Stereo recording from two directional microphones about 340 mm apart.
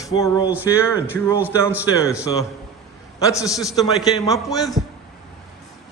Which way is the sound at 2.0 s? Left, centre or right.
Centre.